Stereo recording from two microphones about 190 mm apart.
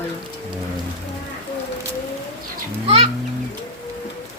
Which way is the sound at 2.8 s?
30° right (ahead or behind).